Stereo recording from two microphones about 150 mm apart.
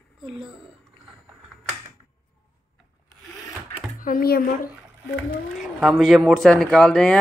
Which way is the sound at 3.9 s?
70° left (ahead or behind).